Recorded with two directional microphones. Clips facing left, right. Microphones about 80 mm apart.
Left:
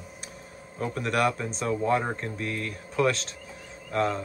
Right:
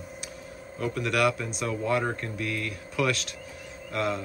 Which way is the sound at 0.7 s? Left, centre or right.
Left.